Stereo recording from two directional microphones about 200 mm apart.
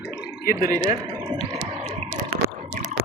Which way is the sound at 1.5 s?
35° right (ahead or behind).